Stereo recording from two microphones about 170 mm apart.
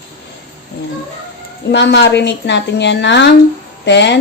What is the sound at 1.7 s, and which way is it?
A woman's voice, 90° left.